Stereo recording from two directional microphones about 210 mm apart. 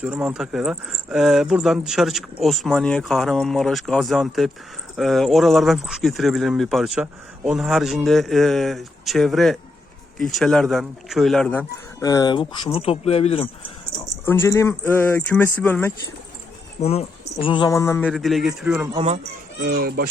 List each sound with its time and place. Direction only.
0.0 s speech: 5° right (ahead or behind); by 13.5 s 30° left (ahead or behind)
14.3 s speech: 15° left (ahead or behind)
16.8 s speech: 30° left (ahead or behind); by 18.0 s 15° left (ahead or behind)
18.0 s speech: centre (ahead or behind)
18.9 s speech: 30° right (ahead or behind)
19.6 s speech: 45° right (ahead or behind)